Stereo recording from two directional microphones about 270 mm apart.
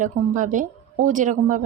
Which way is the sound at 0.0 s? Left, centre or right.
Right.